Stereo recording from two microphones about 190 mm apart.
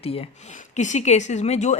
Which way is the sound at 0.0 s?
30° left (ahead or behind).